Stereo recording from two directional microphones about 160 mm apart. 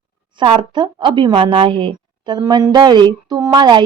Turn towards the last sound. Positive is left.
turn(degrees=-30)  # may be behind; listen again after turning